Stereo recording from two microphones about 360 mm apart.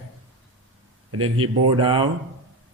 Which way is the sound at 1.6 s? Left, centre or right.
Centre.